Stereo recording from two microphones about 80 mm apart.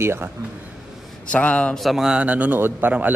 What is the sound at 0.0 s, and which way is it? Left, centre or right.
Speech, right.